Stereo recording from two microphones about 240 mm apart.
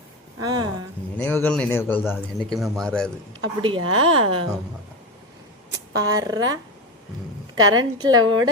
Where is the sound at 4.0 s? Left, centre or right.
Right.